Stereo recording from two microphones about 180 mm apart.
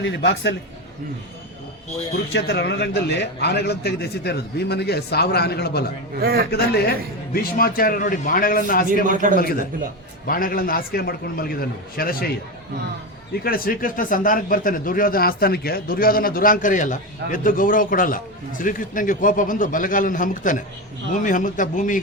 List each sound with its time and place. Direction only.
0.0 s a man's voice: 80° left
2.3 s a man's voice: 70° left (ahead or behind)
6.1 s a man's voice: 60° right (ahead or behind)
6.5 s a man's voice: 65° left (ahead or behind)
9.0 s a man's voice: 45° right (ahead or behind)
9.3 s a man's voice: 55° left (ahead or behind)
13.4 s speech: 55° left (ahead or behind)